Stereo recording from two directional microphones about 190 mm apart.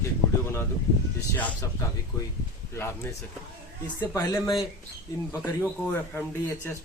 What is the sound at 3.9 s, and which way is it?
Speech, 20° left (ahead or behind).